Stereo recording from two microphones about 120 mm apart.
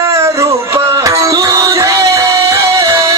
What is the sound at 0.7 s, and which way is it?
Music, 25° right (ahead or behind).